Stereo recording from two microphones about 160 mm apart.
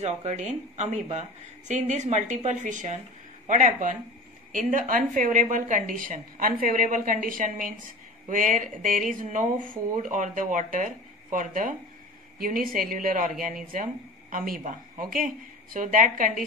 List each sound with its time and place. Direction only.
0.0 s a woman's voice: 40° right (ahead or behind)